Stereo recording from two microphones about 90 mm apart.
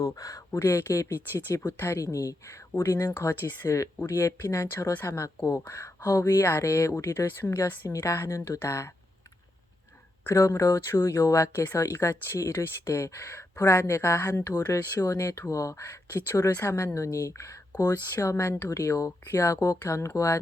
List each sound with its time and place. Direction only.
0.0 s speech: 40° left (ahead or behind)
10.2 s speech: 35° left (ahead or behind)